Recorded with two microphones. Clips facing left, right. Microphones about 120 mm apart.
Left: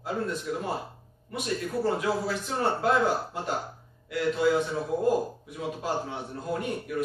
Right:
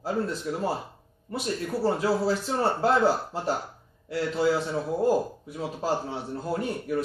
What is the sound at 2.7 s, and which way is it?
A man's voice, 30° right (ahead or behind).